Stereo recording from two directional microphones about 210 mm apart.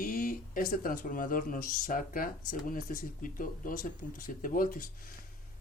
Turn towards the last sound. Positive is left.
turn(degrees=40)  # may be behind; listen again after turning